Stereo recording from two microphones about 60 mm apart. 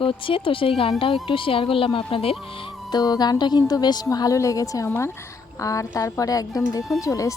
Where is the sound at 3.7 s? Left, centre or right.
Left.